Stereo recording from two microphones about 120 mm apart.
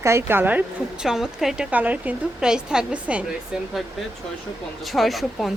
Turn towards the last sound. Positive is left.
turn(degrees=0)  # may be behind; listen again after turning